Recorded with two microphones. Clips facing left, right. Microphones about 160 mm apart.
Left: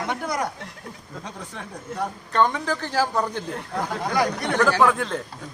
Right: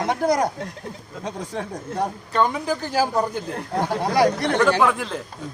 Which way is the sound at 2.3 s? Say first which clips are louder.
Even; 10° right (ahead or behind).